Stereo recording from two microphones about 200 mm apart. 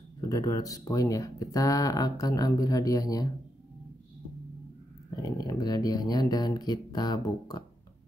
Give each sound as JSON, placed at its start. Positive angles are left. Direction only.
{"t": 0.3, "sound": "speech", "side_deg": 20}
{"t": 5.1, "sound": "speech", "side_deg": 20}